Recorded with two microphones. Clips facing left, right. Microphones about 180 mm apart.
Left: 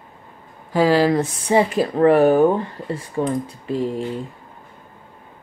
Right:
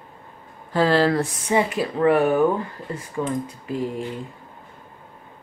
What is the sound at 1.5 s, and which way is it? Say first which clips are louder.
Speech: left 5 dB; 35° left (ahead or behind).